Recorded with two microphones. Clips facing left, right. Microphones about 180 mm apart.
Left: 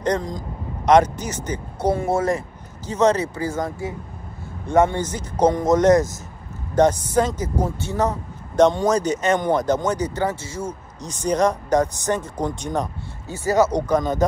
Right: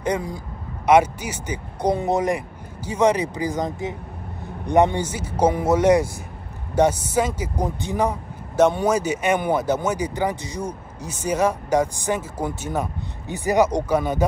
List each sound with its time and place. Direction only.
0.0 s speech: 10° right (ahead or behind)